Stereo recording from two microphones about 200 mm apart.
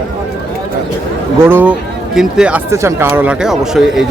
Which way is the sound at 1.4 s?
10° right (ahead or behind).